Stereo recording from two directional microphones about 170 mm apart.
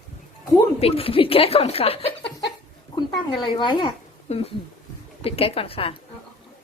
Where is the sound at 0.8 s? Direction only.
35° left (ahead or behind).